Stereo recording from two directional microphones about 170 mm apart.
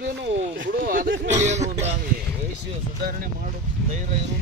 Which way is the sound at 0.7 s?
55° right (ahead or behind).